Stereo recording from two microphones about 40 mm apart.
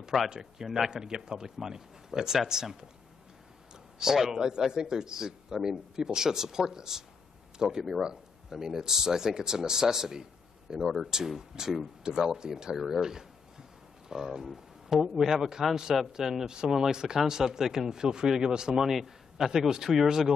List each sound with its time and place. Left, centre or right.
0.4 s speech: centre
4.0 s speech: centre
12.3 s speech: centre
19.4 s speech: centre